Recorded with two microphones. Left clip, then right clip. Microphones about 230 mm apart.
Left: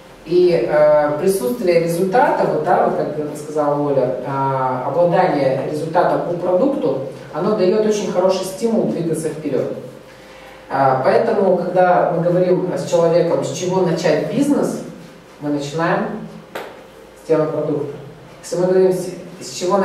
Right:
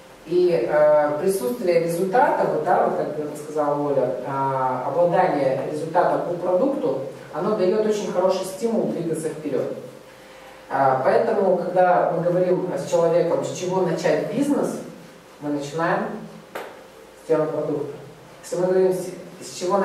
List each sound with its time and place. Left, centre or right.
0.5 s a woman's voice: centre
7.5 s a man's voice: centre
8.9 s a man's voice: centre
10.7 s a man's voice: centre
15.7 s a sound: centre
17.3 s a woman's voice: left